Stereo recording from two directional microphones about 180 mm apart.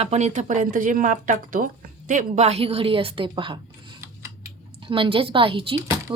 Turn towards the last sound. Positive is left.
turn(degrees=-30)  # may be behind; listen again after turning